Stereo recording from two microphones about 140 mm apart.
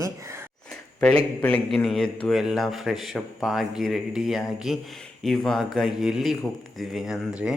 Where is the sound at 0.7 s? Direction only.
5° left (ahead or behind).